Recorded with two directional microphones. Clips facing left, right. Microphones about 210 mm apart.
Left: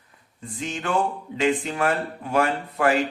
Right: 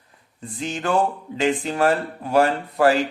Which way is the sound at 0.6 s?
35° right (ahead or behind).